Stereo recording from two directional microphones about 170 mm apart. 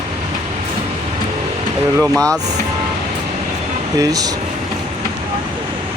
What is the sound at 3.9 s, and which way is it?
Speech, 20° right (ahead or behind).